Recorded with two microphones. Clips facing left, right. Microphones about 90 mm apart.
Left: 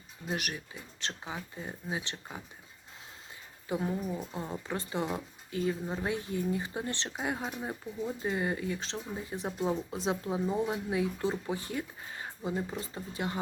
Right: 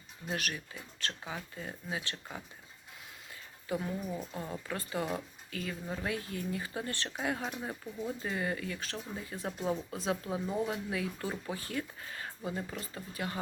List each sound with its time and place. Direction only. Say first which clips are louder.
0.3 s speech: left 1 dB; 20° left (ahead or behind)
3.7 s speech: left 3 dB; 25° left (ahead or behind)
4.1 s speech: left 2 dB; 15° left (ahead or behind)